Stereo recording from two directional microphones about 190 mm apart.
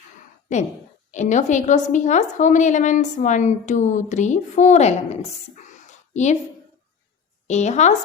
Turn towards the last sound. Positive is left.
turn(degrees=35)  # may be behind; listen again after turning